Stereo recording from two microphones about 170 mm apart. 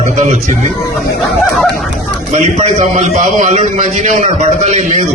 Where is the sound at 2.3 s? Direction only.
45° right (ahead or behind).